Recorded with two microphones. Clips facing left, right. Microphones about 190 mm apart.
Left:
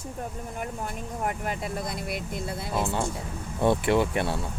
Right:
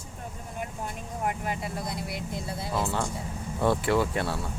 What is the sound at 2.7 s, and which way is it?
Speech, 25° left (ahead or behind).